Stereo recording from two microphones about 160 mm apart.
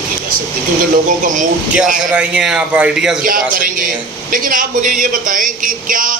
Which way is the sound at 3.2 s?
60° right (ahead or behind).